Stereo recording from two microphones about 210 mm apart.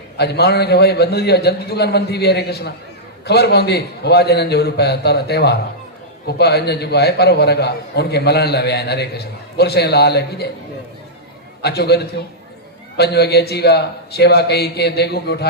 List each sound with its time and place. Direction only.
0.2 s a man's voice: 50° left (ahead or behind)
11.6 s a man's voice: 50° left (ahead or behind)
13.0 s a man's voice: 50° left (ahead or behind)